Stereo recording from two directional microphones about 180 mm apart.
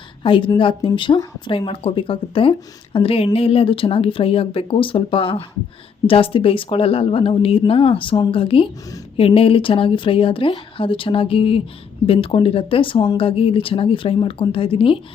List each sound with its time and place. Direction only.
0.2 s speech: 30° left (ahead or behind)